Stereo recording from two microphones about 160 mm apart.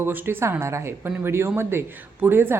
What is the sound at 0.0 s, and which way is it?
Speech, 10° right (ahead or behind).